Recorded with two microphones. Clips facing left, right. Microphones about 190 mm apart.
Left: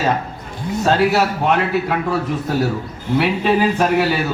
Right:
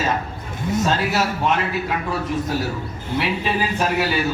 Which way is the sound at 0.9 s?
65° left (ahead or behind).